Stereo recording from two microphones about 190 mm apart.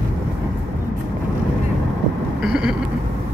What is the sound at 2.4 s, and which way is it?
Speech, 5° right (ahead or behind).